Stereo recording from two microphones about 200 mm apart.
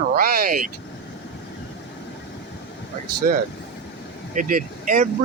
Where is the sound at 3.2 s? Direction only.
40° right (ahead or behind).